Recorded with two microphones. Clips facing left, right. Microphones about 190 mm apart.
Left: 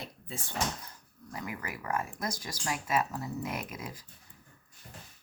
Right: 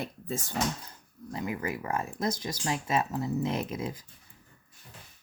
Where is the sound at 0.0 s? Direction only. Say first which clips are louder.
Right 8 dB; 45° right (ahead or behind).